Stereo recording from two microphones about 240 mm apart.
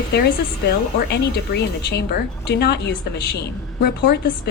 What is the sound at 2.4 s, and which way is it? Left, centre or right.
A woman's voice, left.